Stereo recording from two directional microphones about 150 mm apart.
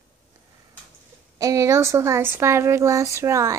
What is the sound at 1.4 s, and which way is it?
Speech, 20° right (ahead or behind).